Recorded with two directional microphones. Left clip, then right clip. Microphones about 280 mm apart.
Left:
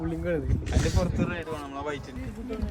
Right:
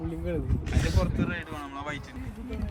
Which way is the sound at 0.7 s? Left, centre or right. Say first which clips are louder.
Left 2 dB; left.